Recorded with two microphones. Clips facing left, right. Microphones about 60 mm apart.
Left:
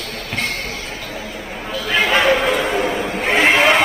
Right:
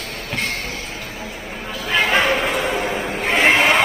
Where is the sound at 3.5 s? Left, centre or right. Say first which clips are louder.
Left 2 dB; left.